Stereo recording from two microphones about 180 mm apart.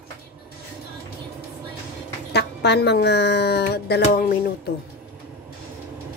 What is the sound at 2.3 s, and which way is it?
Speech, 65° left (ahead or behind).